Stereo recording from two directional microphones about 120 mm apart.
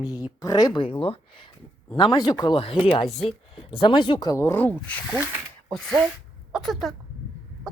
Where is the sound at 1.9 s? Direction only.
40° left (ahead or behind).